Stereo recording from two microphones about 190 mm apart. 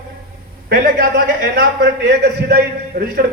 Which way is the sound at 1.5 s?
60° right (ahead or behind).